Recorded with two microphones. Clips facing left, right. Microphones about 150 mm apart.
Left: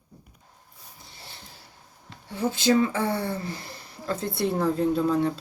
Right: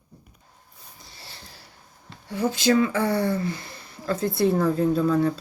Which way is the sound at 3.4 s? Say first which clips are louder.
Right 5 dB; 30° left (ahead or behind).